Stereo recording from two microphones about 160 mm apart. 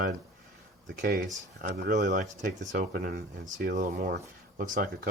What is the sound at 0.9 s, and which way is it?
Speech, 65° right (ahead or behind).